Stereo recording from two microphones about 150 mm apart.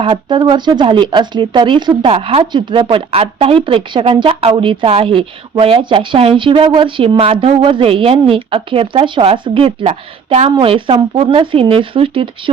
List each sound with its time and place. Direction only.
0.0 s speech: 30° right (ahead or behind)